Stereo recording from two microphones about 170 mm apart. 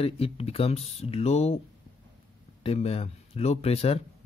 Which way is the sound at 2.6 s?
35° left (ahead or behind).